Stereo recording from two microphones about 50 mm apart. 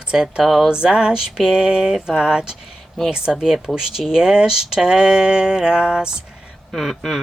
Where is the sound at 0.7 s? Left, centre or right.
Centre.